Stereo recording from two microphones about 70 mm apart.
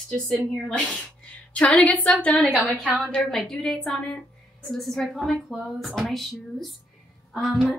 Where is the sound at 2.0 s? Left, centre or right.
Centre.